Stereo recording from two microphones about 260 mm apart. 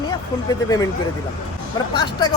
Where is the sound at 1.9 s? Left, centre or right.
Centre.